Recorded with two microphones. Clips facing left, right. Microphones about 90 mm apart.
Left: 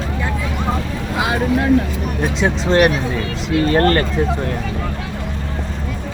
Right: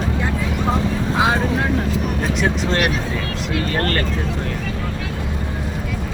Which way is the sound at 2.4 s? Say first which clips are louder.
Left 7 dB; 20° left (ahead or behind).